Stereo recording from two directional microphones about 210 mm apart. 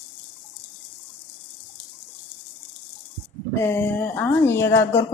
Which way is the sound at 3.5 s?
15° left (ahead or behind).